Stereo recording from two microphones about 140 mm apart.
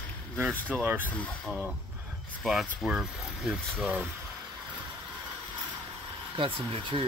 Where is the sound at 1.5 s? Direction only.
Centre (ahead or behind).